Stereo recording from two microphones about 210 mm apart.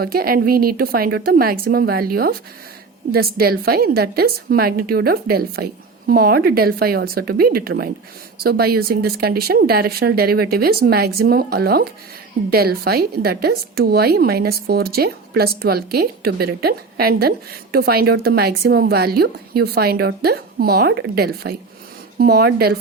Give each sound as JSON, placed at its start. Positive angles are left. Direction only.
{"t": 0.0, "sound": "speech", "side_deg": -45}